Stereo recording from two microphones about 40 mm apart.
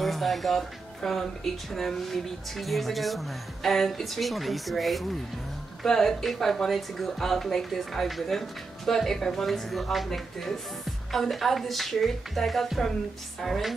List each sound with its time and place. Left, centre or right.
0.0 s speech: centre